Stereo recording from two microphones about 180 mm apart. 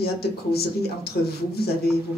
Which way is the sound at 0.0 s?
60° left (ahead or behind).